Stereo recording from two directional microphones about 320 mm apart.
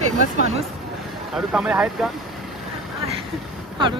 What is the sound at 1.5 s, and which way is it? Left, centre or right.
Speech, centre.